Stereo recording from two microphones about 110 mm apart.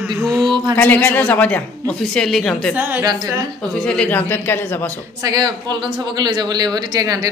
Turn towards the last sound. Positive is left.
turn(degrees=-35)  # may be behind; listen again after turning